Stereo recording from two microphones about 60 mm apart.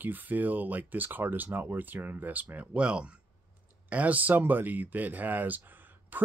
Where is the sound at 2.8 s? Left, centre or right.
Centre.